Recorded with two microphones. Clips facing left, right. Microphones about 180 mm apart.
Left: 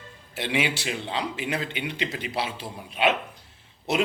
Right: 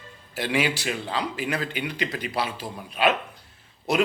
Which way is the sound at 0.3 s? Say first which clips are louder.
Right 2 dB; 25° left (ahead or behind).